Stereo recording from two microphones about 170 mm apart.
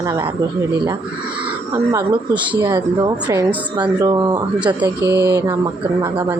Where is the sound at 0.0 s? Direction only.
15° right (ahead or behind).